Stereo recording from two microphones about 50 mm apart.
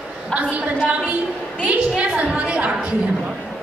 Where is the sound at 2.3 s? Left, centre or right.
Right.